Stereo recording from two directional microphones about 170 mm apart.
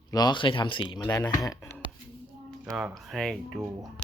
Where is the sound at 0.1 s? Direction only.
25° left (ahead or behind).